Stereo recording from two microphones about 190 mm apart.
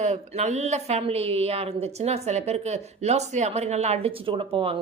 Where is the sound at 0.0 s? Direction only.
35° right (ahead or behind).